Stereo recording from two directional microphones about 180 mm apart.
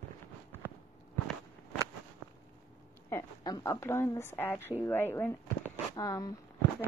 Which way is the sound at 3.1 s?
20° left (ahead or behind).